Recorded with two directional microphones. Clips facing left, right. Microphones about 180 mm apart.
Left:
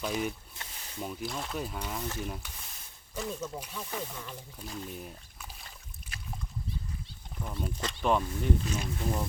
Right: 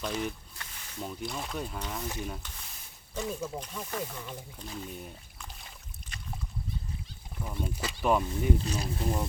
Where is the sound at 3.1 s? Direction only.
5° right (ahead or behind).